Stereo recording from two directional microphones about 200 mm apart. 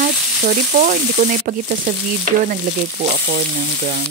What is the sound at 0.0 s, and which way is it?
Frying, 40° right (ahead or behind).